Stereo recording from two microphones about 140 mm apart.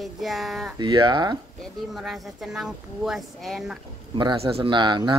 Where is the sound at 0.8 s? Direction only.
30° right (ahead or behind).